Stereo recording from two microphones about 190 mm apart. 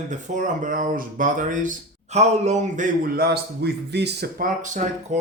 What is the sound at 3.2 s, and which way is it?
Speech, 55° right (ahead or behind).